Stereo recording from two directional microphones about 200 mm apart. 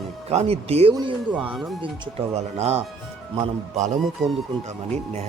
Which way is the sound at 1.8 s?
30° right (ahead or behind).